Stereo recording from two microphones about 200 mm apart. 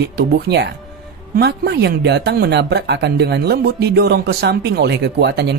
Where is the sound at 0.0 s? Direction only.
55° right (ahead or behind).